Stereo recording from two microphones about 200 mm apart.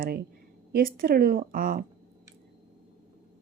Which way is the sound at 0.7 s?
45° right (ahead or behind).